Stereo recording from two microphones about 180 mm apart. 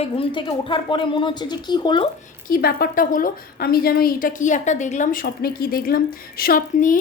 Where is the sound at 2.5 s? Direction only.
60° left (ahead or behind).